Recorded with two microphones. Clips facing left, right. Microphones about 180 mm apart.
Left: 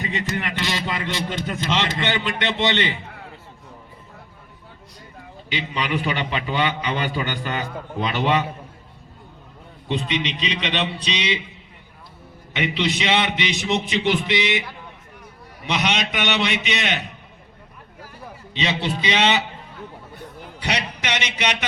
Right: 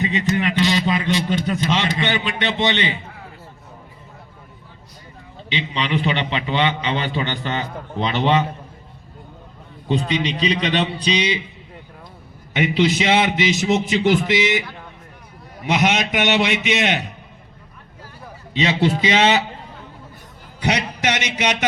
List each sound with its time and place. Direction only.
0.0 s a man's voice: 20° right (ahead or behind)
5.5 s a man's voice: 25° right (ahead or behind)
9.9 s a man's voice: 40° right (ahead or behind)
12.5 s a man's voice: 45° right (ahead or behind)
15.6 s a man's voice: 50° right (ahead or behind)
18.6 s a man's voice: 50° right (ahead or behind)
21.0 s a man's voice: 50° right (ahead or behind)